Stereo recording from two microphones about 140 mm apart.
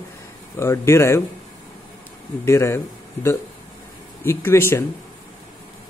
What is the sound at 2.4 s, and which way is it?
Speech, 20° left (ahead or behind).